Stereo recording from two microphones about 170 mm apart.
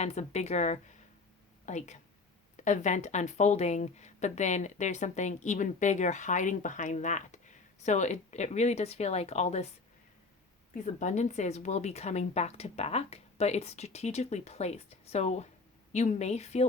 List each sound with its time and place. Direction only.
0.0 s speech: 40° left (ahead or behind)
11.0 s speech: 45° left (ahead or behind)